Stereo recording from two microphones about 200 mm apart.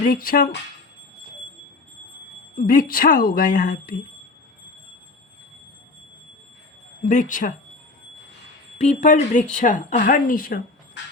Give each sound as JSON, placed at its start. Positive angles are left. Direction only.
{"t": 0.0, "sound": "a woman's voice", "side_deg": 45}
{"t": 2.6, "sound": "a woman's voice", "side_deg": 45}
{"t": 7.0, "sound": "speech", "side_deg": 40}
{"t": 8.8, "sound": "speech", "side_deg": 35}